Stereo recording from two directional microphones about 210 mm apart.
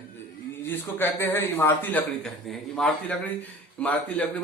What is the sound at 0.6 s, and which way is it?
A man's voice, 10° left (ahead or behind).